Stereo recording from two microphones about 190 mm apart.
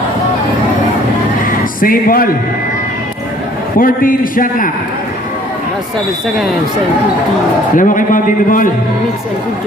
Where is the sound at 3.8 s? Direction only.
50° left (ahead or behind).